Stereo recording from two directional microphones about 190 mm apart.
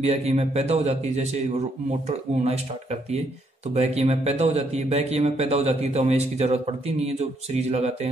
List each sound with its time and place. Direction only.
0.0 s a man's voice: 35° right (ahead or behind)